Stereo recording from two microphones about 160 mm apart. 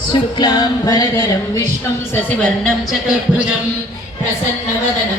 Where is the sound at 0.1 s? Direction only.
25° left (ahead or behind).